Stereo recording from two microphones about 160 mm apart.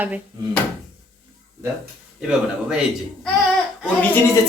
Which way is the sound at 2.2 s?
5° right (ahead or behind).